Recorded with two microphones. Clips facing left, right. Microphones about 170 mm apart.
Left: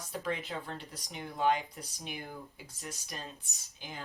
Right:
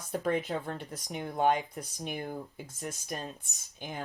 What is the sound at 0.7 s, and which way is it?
Speech, 55° right (ahead or behind).